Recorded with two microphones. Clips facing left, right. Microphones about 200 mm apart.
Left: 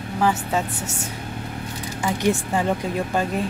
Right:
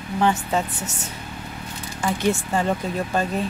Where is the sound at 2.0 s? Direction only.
15° left (ahead or behind).